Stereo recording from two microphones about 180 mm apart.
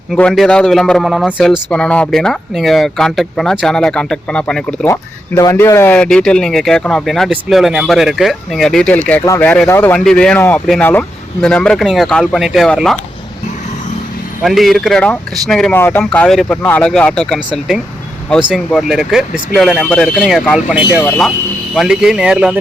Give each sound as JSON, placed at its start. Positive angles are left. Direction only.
{"t": 0.1, "sound": "speech", "side_deg": 0}
{"t": 4.9, "sound": "speech", "side_deg": 20}
{"t": 10.0, "sound": "speech", "side_deg": 5}
{"t": 14.4, "sound": "speech", "side_deg": 0}